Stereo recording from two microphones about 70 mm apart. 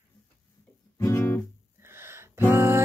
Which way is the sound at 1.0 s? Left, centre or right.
Left.